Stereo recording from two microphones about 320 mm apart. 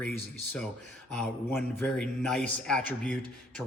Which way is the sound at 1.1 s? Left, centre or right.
Centre.